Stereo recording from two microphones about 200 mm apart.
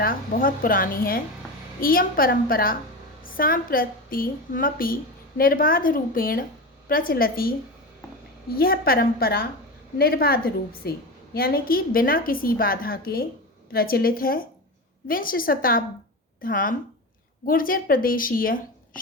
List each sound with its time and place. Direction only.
0.0 s a woman's voice: 45° left (ahead or behind)